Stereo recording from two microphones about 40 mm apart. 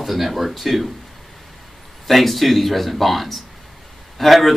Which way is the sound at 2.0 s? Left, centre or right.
Centre.